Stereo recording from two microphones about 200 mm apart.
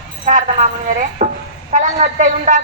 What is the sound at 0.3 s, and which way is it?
Speech, 40° right (ahead or behind).